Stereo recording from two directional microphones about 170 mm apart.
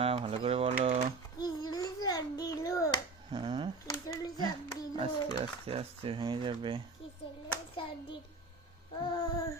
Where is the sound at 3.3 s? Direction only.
30° right (ahead or behind).